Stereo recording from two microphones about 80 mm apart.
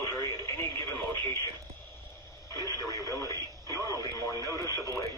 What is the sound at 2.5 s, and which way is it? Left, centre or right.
Radio, left.